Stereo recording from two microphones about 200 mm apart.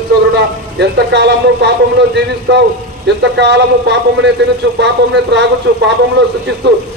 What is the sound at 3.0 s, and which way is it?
A man's voice, 60° right (ahead or behind).